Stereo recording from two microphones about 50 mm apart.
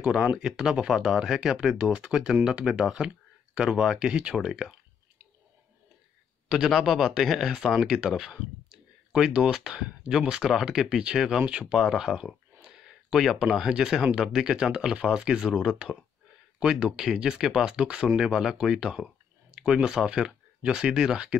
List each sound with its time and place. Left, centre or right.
0.4 s speech: centre
6.7 s speech: centre
12.6 s a sound: centre
13.6 s speech: centre